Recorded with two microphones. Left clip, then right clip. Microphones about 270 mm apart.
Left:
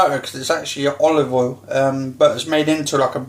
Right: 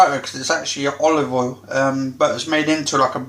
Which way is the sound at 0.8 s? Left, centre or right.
Centre.